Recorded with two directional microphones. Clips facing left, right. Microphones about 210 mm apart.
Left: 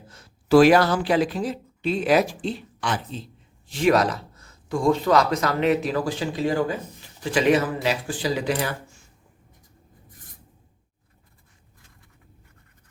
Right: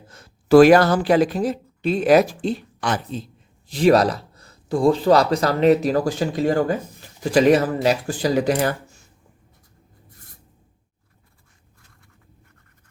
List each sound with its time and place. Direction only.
0.1 s speech: 50° right (ahead or behind)